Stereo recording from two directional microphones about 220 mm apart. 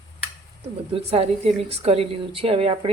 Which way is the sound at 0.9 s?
25° right (ahead or behind).